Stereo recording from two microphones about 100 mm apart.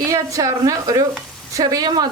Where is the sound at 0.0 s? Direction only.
35° right (ahead or behind).